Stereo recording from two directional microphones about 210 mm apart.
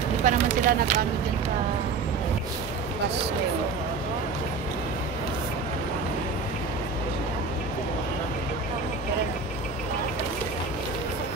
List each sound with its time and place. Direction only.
0.2 s speech: 35° right (ahead or behind)